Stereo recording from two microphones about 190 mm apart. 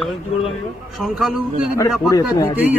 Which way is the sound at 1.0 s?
Centre (ahead or behind).